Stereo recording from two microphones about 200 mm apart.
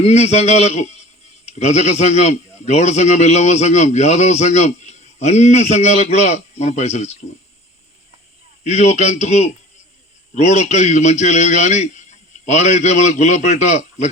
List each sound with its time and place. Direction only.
0.0 s a man's voice: 35° left (ahead or behind)
8.6 s a man's voice: 35° left (ahead or behind)